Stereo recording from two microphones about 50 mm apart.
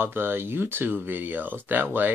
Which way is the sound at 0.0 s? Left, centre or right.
Right.